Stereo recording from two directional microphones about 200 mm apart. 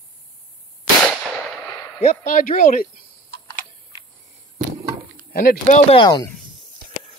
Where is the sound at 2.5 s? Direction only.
40° left (ahead or behind).